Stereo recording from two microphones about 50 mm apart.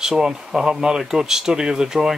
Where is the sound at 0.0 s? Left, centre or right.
Centre.